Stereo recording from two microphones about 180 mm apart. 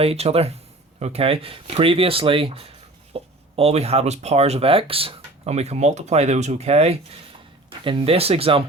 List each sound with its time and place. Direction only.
0.0 s speech: 35° right (ahead or behind)